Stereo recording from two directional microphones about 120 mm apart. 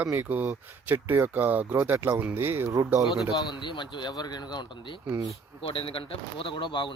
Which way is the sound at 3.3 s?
40° left (ahead or behind).